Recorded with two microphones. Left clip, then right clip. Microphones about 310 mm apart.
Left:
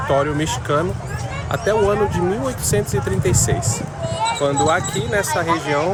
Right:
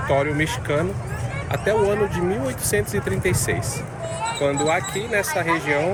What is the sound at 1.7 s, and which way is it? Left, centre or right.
Speech, left.